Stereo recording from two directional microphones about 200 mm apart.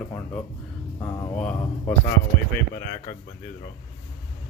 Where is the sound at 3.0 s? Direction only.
40° left (ahead or behind).